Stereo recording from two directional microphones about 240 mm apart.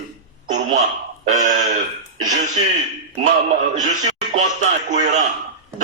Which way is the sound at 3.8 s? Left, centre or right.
Right.